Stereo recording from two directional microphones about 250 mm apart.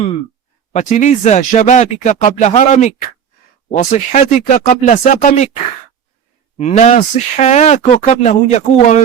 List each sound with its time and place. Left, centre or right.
0.7 s speech: left
6.6 s speech: left